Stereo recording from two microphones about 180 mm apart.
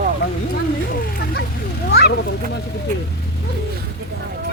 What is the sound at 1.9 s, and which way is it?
Speech, 65° left (ahead or behind).